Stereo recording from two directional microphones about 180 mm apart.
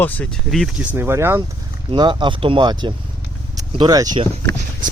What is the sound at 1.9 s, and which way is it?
Speech, 25° right (ahead or behind).